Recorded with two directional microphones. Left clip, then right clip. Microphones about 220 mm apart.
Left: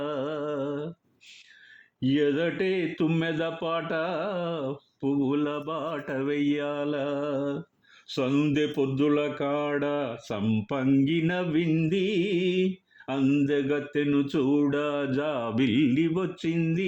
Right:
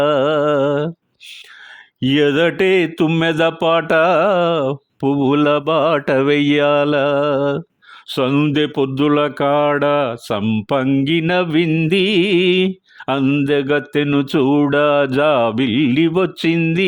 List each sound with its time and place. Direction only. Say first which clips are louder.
0.0 s mantra: right 16 dB; 50° right (ahead or behind)
2.0 s speech: right 11 dB; 50° right (ahead or behind)